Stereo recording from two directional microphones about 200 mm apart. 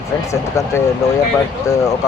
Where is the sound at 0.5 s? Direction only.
15° left (ahead or behind).